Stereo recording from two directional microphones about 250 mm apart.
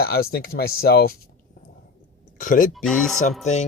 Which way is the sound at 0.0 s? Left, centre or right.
Left.